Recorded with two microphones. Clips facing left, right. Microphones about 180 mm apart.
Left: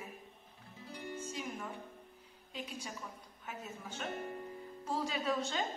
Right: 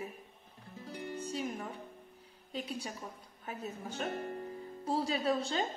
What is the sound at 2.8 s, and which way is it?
A woman's voice, 35° right (ahead or behind).